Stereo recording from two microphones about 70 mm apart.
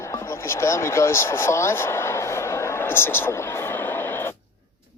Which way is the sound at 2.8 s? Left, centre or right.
Left.